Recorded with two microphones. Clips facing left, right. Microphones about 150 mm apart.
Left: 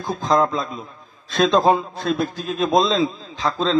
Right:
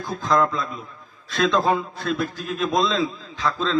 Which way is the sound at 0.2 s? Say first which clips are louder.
Left 2 dB; 25° left (ahead or behind).